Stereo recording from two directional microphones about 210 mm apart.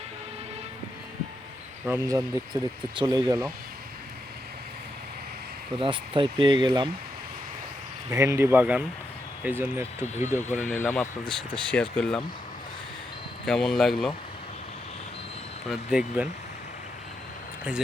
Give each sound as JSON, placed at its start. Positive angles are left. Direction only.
{"t": 1.9, "sound": "speech", "side_deg": -15}
{"t": 5.8, "sound": "speech", "side_deg": -25}
{"t": 8.1, "sound": "speech", "side_deg": -15}
{"t": 10.6, "sound": "speech", "side_deg": 5}
{"t": 13.4, "sound": "speech", "side_deg": 5}
{"t": 15.7, "sound": "speech", "side_deg": -5}